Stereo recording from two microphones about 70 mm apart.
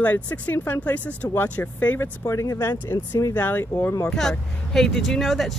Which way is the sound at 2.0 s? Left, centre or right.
Left.